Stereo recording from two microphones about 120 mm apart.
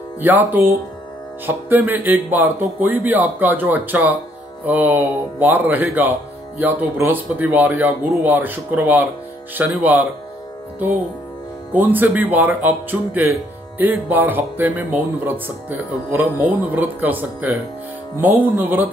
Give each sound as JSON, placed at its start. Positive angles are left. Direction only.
{"t": 0.2, "sound": "speech", "side_deg": -15}
{"t": 11.7, "sound": "speech", "side_deg": -15}
{"t": 18.6, "sound": "speech", "side_deg": -15}